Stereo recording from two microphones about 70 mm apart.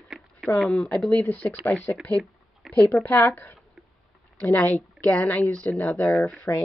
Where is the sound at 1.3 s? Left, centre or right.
Left.